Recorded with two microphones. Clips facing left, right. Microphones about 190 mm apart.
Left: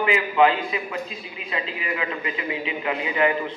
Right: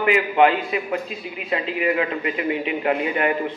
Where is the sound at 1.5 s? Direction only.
50° right (ahead or behind).